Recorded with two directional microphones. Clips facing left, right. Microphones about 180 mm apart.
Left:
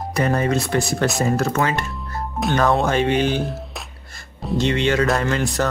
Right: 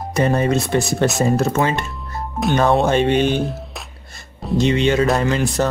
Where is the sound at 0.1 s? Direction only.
25° right (ahead or behind).